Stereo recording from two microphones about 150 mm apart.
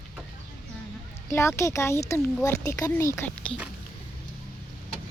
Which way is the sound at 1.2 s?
20° left (ahead or behind).